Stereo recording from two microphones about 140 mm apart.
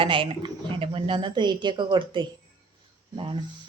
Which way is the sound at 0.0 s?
40° right (ahead or behind).